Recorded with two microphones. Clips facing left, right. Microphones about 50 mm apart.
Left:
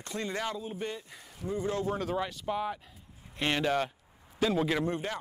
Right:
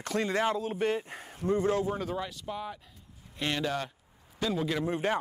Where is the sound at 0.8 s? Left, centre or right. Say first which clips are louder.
Right 8 dB; right.